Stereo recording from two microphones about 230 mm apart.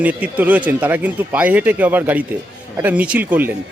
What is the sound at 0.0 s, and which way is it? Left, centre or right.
Speech, centre.